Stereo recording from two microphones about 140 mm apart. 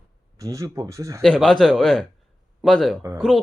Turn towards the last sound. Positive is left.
turn(degrees=0)  # may be behind; listen again after turning